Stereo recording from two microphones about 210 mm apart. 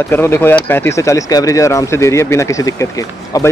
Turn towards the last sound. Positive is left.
turn(degrees=15)  # may be behind; listen again after turning